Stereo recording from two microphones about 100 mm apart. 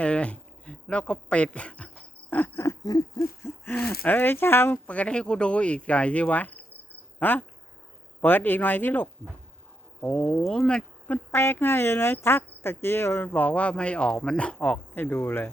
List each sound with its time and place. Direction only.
0.0 s speech: 10° left (ahead or behind)
2.3 s a sound: 25° left (ahead or behind)
2.8 s owl: 40° left (ahead or behind)
3.4 s speech: 15° left (ahead or behind)
11.3 s speech: 25° left (ahead or behind)